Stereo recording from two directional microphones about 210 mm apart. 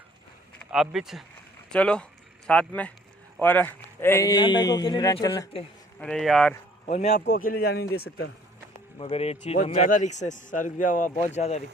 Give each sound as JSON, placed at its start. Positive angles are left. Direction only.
{"t": 0.6, "sound": "a man's voice", "side_deg": 0}
{"t": 6.0, "sound": "speech", "side_deg": 5}
{"t": 6.8, "sound": "speech", "side_deg": 30}
{"t": 7.1, "sound": "speech", "side_deg": 40}
{"t": 9.0, "sound": "a man's voice", "side_deg": 25}